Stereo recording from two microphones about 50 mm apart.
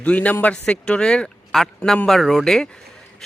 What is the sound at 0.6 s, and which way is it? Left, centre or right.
Speech, centre.